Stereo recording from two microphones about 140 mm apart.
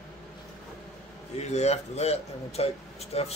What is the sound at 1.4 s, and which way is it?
Speech, 50° left (ahead or behind).